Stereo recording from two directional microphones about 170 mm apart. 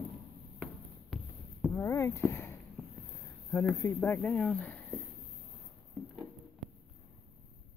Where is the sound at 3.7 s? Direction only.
15° left (ahead or behind).